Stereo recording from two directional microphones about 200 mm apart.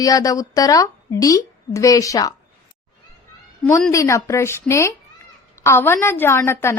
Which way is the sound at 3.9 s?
15° left (ahead or behind).